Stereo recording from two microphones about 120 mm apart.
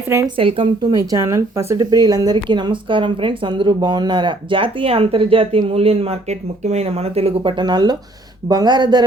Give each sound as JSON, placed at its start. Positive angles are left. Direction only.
{"t": 0.3, "sound": "speech", "side_deg": -50}
{"t": 0.9, "sound": "speech", "side_deg": -25}